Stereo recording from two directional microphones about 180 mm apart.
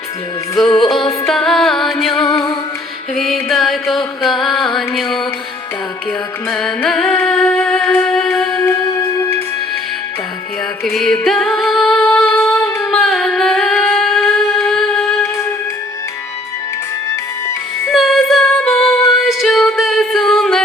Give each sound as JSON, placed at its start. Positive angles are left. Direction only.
{"t": 0.8, "sound": "music", "side_deg": 0}
{"t": 2.2, "sound": "music", "side_deg": 20}
{"t": 3.2, "sound": "music", "side_deg": 0}
{"t": 6.5, "sound": "music", "side_deg": 0}
{"t": 10.8, "sound": "music", "side_deg": 0}
{"t": 12.4, "sound": "female singing", "side_deg": 5}
{"t": 12.9, "sound": "singing", "side_deg": 0}
{"t": 14.7, "sound": "music", "side_deg": 5}
{"t": 17.9, "sound": "music", "side_deg": 0}